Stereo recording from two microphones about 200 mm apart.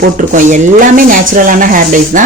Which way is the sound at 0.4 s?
40° right (ahead or behind).